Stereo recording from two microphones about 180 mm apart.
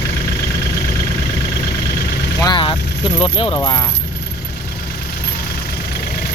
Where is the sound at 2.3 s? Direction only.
25° left (ahead or behind).